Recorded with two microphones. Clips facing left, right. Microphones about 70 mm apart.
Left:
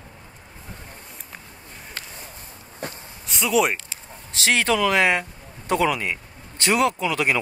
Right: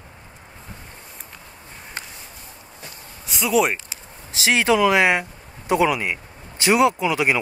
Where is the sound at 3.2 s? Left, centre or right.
Centre.